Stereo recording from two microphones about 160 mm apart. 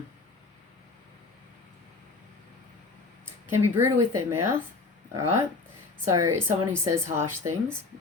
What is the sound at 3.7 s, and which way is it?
Speech, 15° right (ahead or behind).